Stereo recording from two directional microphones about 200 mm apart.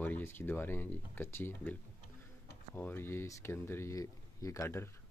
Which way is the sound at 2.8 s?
10° left (ahead or behind).